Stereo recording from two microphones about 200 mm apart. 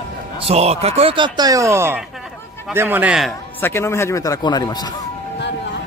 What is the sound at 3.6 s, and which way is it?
A man's voice, 10° left (ahead or behind).